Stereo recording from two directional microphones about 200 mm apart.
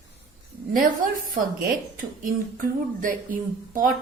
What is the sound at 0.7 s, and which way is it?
A woman's voice, 45° right (ahead or behind).